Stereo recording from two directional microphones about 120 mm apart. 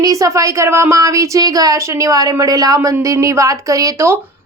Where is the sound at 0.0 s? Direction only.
30° right (ahead or behind).